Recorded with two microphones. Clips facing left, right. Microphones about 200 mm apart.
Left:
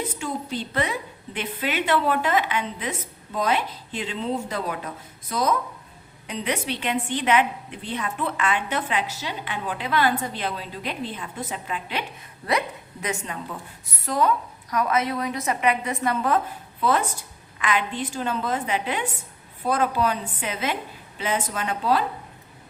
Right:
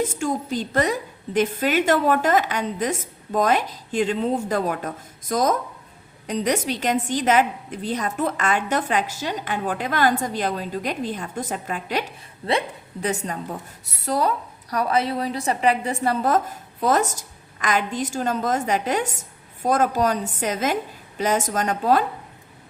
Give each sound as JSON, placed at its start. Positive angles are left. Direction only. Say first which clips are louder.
{"t": 0.0, "sound": "a woman's voice", "louder": "right 6 dB", "side_deg": -45}
{"t": 12.5, "sound": "a woman's voice", "louder": "right 2 dB", "side_deg": -30}